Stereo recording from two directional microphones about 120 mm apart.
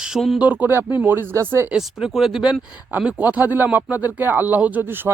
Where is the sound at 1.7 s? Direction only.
5° right (ahead or behind).